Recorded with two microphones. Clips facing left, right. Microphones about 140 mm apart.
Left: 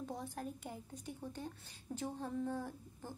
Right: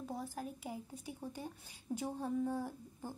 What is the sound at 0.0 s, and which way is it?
A woman's voice, 5° right (ahead or behind).